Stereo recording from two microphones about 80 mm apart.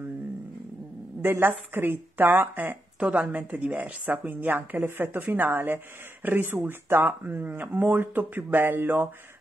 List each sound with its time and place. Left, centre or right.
1.2 s speech: right